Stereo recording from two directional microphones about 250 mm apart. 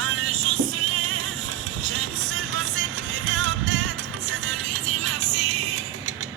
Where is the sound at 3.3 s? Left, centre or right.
Right.